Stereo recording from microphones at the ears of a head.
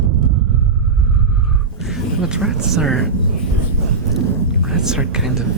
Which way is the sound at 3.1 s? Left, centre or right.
Right.